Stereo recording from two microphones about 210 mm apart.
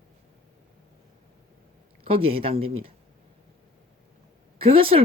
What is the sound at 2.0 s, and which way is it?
Speech, 25° right (ahead or behind).